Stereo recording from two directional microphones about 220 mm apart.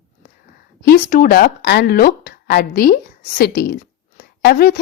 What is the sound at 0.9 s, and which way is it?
A woman's voice, 40° left (ahead or behind).